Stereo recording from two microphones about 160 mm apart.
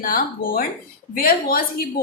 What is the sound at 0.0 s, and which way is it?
A woman's voice, 60° left (ahead or behind).